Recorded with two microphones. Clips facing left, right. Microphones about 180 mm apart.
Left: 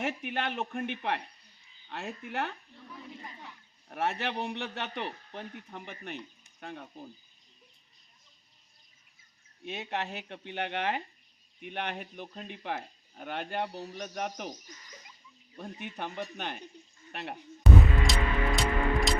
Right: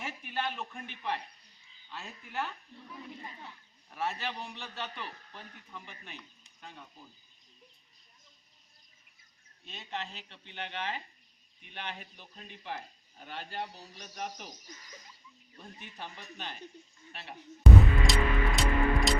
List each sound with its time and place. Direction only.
0.0 s speech: 60° left (ahead or behind)
3.8 s speech: 65° left (ahead or behind)
9.6 s speech: 65° left (ahead or behind)
15.5 s speech: 60° left (ahead or behind)
17.6 s music: centre (ahead or behind)